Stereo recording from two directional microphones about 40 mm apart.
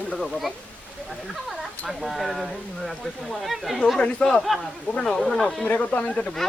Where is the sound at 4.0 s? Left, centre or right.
Left.